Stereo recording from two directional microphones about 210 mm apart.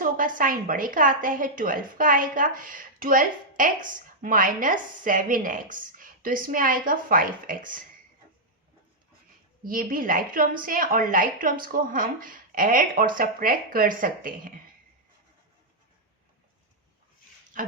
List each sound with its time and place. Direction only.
0.0 s a woman's voice: 40° right (ahead or behind)
9.6 s a woman's voice: 40° right (ahead or behind)